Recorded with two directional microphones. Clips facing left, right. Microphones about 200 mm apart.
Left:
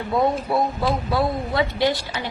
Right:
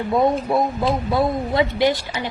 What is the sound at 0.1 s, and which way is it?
Speech, 20° right (ahead or behind).